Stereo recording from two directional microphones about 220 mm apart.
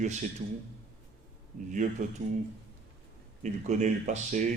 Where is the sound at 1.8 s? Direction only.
35° right (ahead or behind).